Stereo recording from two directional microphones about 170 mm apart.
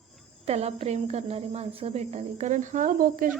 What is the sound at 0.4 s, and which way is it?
A woman's voice, 40° right (ahead or behind).